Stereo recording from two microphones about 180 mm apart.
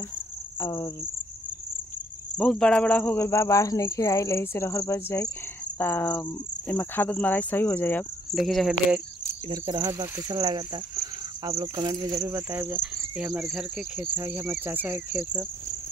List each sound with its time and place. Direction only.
0.6 s cricket: 20° left (ahead or behind)
2.3 s speech: 5° left (ahead or behind)
8.4 s speech: centre (ahead or behind)
9.5 s speech: 20° right (ahead or behind)